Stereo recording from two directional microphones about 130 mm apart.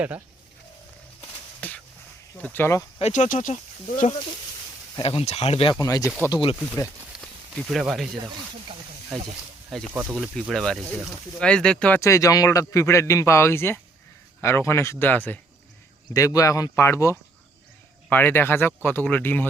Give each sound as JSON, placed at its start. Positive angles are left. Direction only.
{"t": 1.6, "sound": "speech", "side_deg": 10}
{"t": 3.0, "sound": "speech", "side_deg": 65}
{"t": 5.0, "sound": "speech", "side_deg": 50}
{"t": 5.8, "sound": "a man's voice", "side_deg": 25}
{"t": 6.1, "sound": "speech", "side_deg": -10}
{"t": 6.3, "sound": "speech", "side_deg": 45}
{"t": 7.7, "sound": "speech", "side_deg": 0}
{"t": 9.9, "sound": "speech", "side_deg": -15}
{"t": 10.5, "sound": "speech", "side_deg": 5}
{"t": 11.9, "sound": "a man's voice", "side_deg": 25}
{"t": 16.1, "sound": "a man's voice", "side_deg": 25}